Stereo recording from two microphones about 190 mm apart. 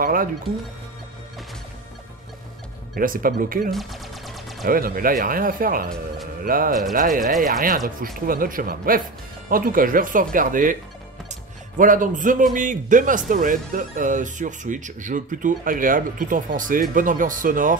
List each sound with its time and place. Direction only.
0.0 s speech: 45° right (ahead or behind)
3.0 s speech: 50° right (ahead or behind)
3.7 s a sound: centre (ahead or behind)
4.6 s speech: 50° right (ahead or behind)
11.8 s speech: 45° right (ahead or behind)